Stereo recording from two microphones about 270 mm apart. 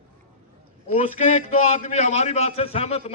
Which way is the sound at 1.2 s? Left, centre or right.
Left.